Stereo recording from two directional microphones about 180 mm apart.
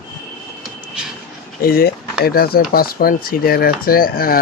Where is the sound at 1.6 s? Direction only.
55° left (ahead or behind).